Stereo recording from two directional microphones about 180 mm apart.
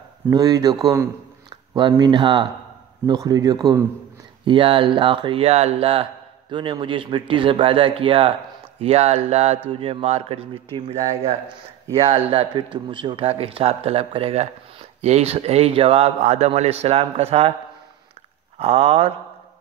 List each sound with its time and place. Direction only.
0.3 s speech: 20° right (ahead or behind)
18.6 s speech: 35° right (ahead or behind)